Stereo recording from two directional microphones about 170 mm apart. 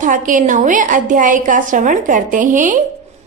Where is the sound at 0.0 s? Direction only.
50° right (ahead or behind).